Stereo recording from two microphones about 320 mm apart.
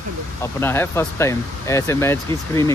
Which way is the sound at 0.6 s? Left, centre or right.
Centre.